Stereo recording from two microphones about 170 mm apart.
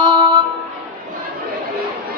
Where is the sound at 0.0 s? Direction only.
25° right (ahead or behind).